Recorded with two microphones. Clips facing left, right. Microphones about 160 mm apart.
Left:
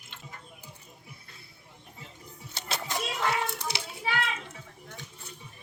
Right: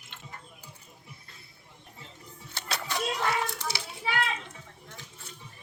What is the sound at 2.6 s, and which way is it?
Music, 15° left (ahead or behind).